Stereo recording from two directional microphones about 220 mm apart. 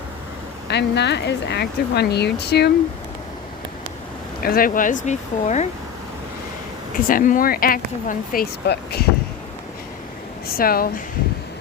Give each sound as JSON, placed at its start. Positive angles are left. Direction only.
{"t": 0.7, "sound": "speech", "side_deg": 50}
{"t": 4.4, "sound": "speech", "side_deg": 40}
{"t": 6.9, "sound": "speech", "side_deg": 40}
{"t": 10.6, "sound": "speech", "side_deg": 40}